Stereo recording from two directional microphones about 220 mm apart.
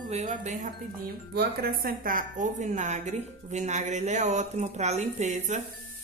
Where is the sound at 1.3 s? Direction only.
45° right (ahead or behind).